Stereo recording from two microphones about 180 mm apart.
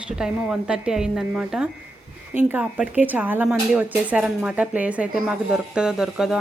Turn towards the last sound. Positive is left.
turn(degrees=0)  # may be behind; listen again after turning